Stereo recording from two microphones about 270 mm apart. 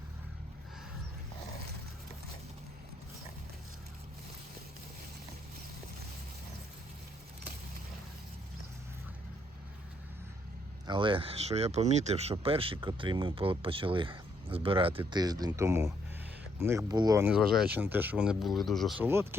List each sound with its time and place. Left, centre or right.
10.8 s speech: centre